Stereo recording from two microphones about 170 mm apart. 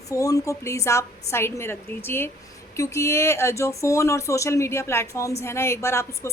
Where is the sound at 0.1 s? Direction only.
20° left (ahead or behind).